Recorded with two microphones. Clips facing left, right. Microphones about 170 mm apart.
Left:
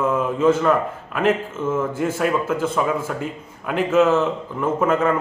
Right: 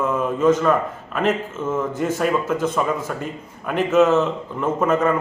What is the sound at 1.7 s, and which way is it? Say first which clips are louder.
Speech: right 1 dB; 10° left (ahead or behind).